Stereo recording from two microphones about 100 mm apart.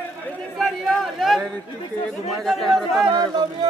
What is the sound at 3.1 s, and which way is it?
Speech, 50° right (ahead or behind).